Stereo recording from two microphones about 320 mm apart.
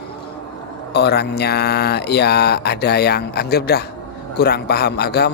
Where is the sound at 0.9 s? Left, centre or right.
Left.